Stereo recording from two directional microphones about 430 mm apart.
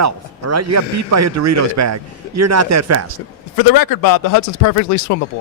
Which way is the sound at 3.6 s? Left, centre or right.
Left.